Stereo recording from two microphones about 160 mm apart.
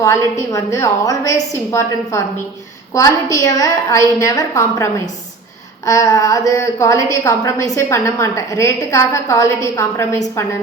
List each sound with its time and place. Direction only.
0.5 s a woman's voice: 20° left (ahead or behind)